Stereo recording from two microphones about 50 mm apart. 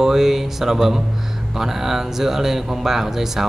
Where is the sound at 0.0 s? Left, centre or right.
Centre.